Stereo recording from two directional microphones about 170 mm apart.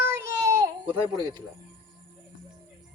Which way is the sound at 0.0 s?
15° right (ahead or behind).